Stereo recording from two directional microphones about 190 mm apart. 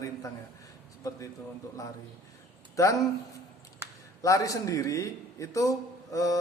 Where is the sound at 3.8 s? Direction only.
15° right (ahead or behind).